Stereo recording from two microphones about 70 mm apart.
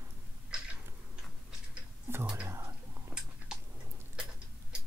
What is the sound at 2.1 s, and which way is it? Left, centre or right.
Whispering, right.